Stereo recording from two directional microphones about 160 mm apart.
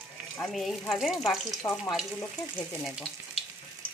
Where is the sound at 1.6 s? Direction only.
20° left (ahead or behind).